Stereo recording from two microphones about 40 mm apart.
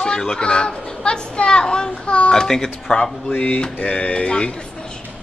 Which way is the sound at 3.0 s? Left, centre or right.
Left.